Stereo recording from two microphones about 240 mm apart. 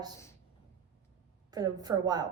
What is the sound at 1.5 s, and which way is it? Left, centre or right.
Speech, centre.